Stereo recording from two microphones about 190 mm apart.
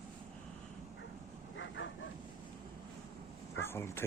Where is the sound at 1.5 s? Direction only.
75° left (ahead or behind).